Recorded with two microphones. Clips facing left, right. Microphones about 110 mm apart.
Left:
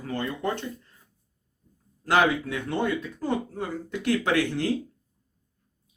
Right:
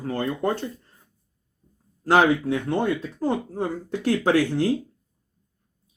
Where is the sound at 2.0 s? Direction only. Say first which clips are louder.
Right 4 dB; 35° right (ahead or behind).